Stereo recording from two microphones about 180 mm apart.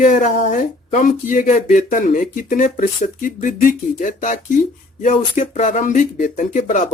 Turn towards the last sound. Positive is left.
turn(degrees=45)  # may be behind; listen again after turning